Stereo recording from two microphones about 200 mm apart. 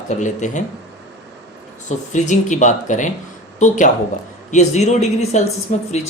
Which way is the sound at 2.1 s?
40° left (ahead or behind).